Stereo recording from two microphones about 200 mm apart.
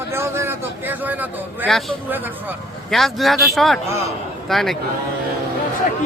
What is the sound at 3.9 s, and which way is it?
Speech, 15° right (ahead or behind).